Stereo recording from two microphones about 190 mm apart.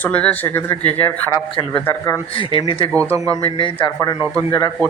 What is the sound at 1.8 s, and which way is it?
Speech, 15° left (ahead or behind).